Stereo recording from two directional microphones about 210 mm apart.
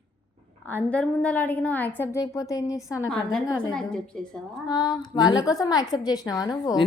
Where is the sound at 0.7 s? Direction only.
5° left (ahead or behind).